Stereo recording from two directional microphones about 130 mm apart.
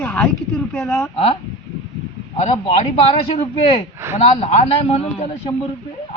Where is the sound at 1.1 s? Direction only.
45° left (ahead or behind).